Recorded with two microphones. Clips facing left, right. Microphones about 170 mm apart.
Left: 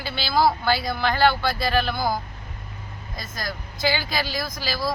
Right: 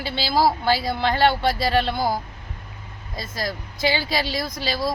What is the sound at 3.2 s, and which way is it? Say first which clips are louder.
Speech: right 4 dB; 25° right (ahead or behind).